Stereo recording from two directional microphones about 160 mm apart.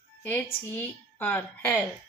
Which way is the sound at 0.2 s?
10° left (ahead or behind).